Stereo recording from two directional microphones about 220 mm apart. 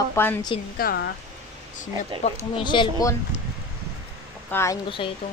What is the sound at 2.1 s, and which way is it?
Speech, 25° right (ahead or behind).